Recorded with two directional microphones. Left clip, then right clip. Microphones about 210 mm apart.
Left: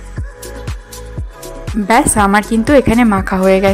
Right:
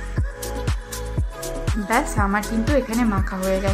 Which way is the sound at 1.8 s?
40° left (ahead or behind).